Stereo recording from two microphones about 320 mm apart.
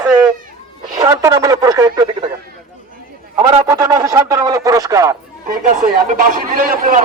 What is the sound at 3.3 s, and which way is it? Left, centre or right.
A man's voice, centre.